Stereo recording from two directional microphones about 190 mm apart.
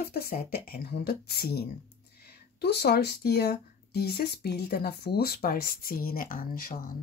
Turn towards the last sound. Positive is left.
turn(degrees=50)  # may be behind; listen again after turning